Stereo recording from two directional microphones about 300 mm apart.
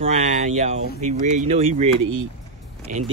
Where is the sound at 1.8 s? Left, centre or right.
Right.